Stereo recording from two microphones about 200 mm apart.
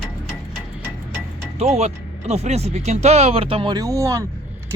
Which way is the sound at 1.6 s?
35° right (ahead or behind).